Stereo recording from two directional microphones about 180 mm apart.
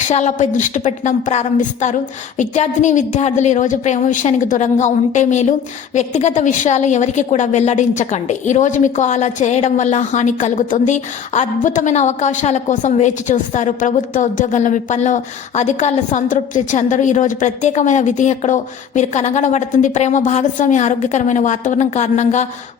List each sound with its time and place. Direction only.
0.1 s a woman's voice: 40° left (ahead or behind)